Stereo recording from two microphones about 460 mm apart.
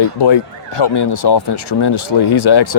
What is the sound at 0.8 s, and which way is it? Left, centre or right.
Speech, left.